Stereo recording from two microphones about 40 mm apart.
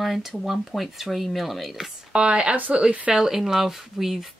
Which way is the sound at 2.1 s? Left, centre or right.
Right.